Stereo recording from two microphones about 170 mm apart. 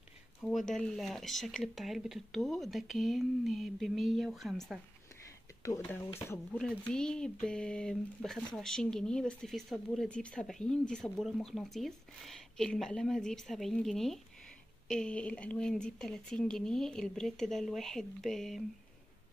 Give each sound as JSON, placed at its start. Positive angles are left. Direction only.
{"t": 0.4, "sound": "speech", "side_deg": 0}
{"t": 5.6, "sound": "speech", "side_deg": 20}